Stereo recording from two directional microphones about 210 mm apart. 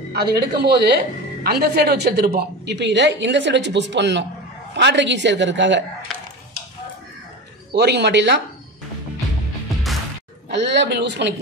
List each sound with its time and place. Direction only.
0.1 s a woman's voice: 50° right (ahead or behind)
7.7 s a woman's voice: 55° right (ahead or behind)
10.5 s a woman's voice: 55° right (ahead or behind)